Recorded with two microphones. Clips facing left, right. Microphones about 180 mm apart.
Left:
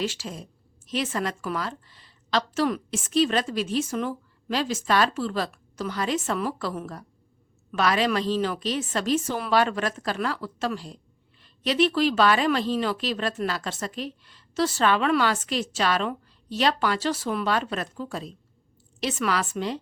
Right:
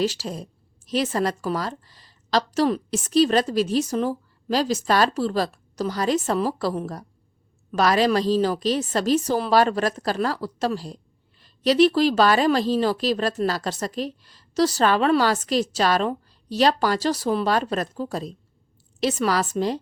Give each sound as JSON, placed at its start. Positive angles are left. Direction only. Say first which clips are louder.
{"t": 0.0, "sound": "a woman's voice", "louder": "right 5 dB", "side_deg": -40}